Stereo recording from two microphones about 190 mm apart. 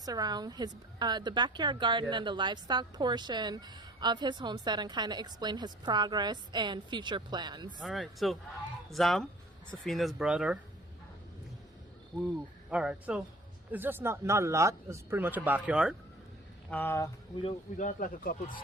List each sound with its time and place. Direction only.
0.0 s a woman's voice: 20° right (ahead or behind)
7.8 s speech: centre (ahead or behind)
12.7 s speech: 5° right (ahead or behind)
16.6 s speech: 10° left (ahead or behind)
17.7 s speech: 45° left (ahead or behind)